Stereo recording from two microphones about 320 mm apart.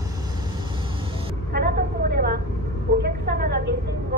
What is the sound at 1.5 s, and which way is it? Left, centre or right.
Vehicle, right.